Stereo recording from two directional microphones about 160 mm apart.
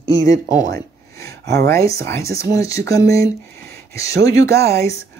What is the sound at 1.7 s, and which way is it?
Speech, 20° left (ahead or behind).